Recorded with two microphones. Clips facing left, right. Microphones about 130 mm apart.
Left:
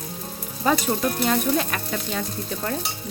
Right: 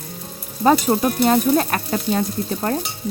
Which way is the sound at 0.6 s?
40° right (ahead or behind).